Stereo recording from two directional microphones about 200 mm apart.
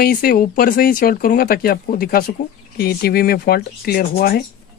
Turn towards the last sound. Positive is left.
turn(degrees=50)  # may be behind; listen again after turning